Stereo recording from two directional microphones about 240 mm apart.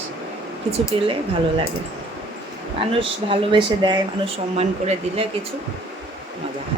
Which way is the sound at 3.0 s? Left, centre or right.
Right.